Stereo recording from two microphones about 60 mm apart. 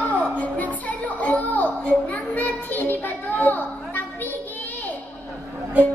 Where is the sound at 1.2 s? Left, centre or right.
Left.